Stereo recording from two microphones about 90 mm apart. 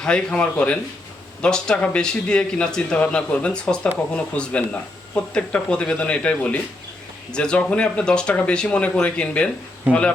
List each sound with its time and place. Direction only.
0.0 s speech: 10° left (ahead or behind)